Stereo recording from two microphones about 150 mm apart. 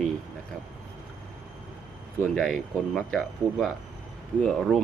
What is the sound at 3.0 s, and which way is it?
Speech, 5° left (ahead or behind).